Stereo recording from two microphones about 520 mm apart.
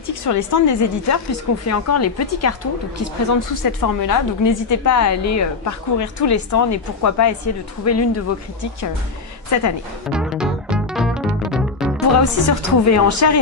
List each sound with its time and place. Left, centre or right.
0.0 s a woman's voice: left
9.5 s a woman's voice: left
10.1 s music: centre
12.2 s a woman's voice: left